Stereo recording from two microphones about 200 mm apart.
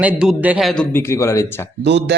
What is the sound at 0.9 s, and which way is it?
Speech, 15° left (ahead or behind).